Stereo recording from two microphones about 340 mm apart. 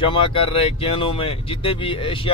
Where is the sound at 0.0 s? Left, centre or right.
Centre.